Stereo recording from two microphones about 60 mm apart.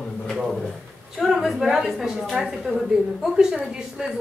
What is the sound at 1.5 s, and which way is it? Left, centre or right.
A woman's voice, centre.